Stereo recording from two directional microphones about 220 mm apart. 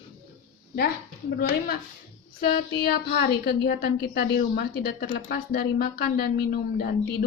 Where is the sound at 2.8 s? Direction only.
45° left (ahead or behind).